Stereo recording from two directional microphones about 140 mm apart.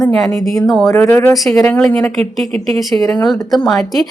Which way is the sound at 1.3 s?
Centre (ahead or behind).